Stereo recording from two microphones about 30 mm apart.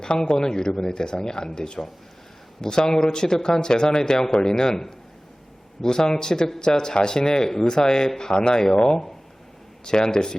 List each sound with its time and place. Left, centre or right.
0.3 s speech: left
5.8 s speech: left